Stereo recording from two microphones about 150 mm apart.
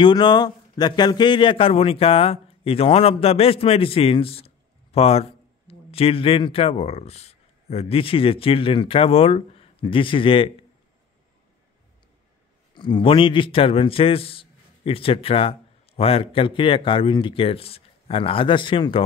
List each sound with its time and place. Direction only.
0.0 s a man's voice: 30° left (ahead or behind)
12.7 s a man's voice: 30° left (ahead or behind)